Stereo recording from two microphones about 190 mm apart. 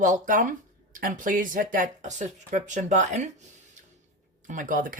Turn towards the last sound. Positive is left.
turn(degrees=-45)  # may be behind; listen again after turning